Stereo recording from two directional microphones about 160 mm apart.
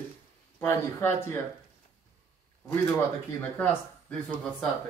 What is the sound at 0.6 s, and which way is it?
Speech, 15° left (ahead or behind).